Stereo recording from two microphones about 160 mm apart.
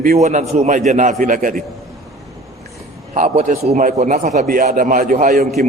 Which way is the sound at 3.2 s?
55° right (ahead or behind).